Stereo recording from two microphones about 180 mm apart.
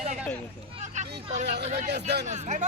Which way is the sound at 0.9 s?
40° right (ahead or behind).